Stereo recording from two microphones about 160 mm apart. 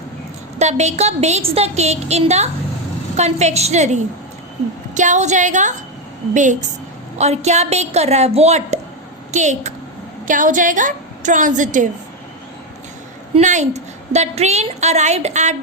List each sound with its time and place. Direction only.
0.6 s a woman's voice: 45° right (ahead or behind)
13.4 s a woman's voice: 50° right (ahead or behind)